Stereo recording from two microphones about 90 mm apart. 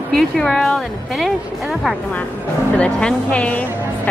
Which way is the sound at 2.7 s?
15° left (ahead or behind).